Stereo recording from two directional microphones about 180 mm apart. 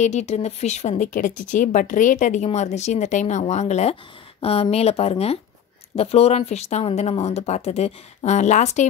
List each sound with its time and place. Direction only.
0.0 s speech: 40° left (ahead or behind)